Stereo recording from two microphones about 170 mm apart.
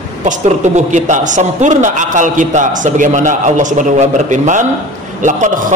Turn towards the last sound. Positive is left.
turn(degrees=-45)  # may be behind; listen again after turning